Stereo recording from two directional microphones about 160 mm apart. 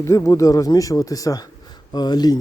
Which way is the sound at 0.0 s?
20° left (ahead or behind).